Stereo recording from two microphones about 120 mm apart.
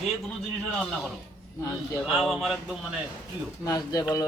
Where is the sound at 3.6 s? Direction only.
30° left (ahead or behind).